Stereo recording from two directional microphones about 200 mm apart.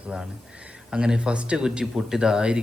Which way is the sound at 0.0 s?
5° right (ahead or behind).